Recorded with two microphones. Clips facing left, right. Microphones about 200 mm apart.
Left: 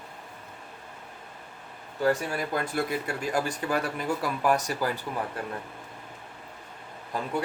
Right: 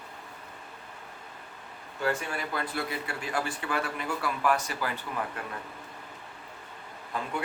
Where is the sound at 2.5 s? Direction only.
45° left (ahead or behind).